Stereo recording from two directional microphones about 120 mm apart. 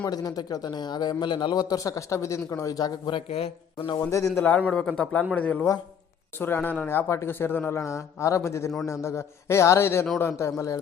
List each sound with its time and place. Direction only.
0.0 s speech: 35° left (ahead or behind)
3.2 s speech: 55° left (ahead or behind)
4.4 s a man's voice: 15° left (ahead or behind)